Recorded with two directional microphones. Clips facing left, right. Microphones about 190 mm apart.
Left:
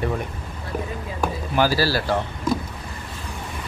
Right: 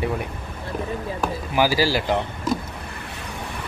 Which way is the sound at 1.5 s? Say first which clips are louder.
Even; 15° right (ahead or behind).